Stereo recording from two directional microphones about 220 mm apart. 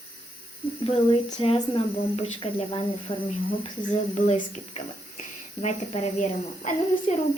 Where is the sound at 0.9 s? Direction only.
25° left (ahead or behind).